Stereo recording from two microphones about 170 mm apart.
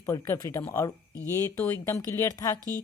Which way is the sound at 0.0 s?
20° left (ahead or behind).